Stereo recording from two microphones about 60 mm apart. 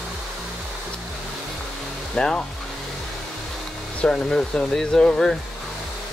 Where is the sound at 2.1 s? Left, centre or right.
Centre.